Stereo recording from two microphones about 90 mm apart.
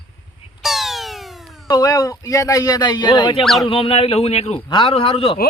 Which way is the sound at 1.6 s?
45° left (ahead or behind).